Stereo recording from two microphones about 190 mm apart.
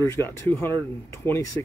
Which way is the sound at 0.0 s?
15° left (ahead or behind).